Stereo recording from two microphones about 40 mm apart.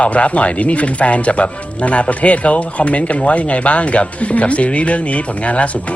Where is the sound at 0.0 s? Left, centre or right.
Left.